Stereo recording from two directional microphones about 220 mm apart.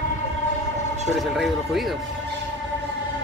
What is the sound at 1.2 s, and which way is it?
Speech, centre (ahead or behind).